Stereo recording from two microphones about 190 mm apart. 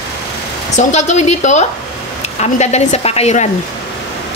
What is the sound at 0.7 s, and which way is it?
A woman's voice, 35° left (ahead or behind).